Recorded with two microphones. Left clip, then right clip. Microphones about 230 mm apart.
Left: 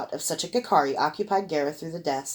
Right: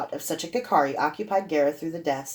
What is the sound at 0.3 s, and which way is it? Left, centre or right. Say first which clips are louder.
Speech: left 2 dB; left.